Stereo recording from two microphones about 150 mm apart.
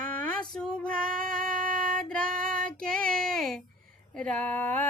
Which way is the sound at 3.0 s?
70° right (ahead or behind).